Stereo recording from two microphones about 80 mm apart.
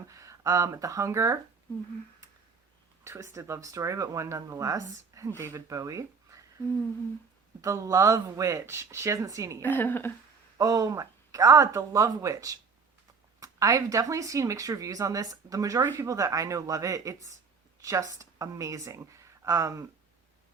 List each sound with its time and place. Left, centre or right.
0.1 s speech: right
3.0 s speech: right
7.6 s speech: right
9.6 s a woman's voice: left
10.6 s speech: right